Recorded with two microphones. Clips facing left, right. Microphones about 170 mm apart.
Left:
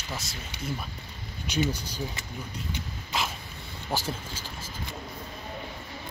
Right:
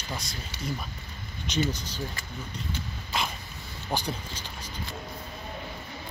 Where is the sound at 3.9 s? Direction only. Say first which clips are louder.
Even; 5° left (ahead or behind).